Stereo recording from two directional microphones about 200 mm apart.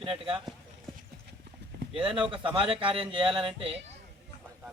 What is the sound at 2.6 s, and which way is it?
A man's voice, 25° right (ahead or behind).